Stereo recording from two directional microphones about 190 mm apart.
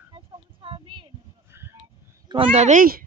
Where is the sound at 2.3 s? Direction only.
30° right (ahead or behind); by 3.0 s 45° right (ahead or behind).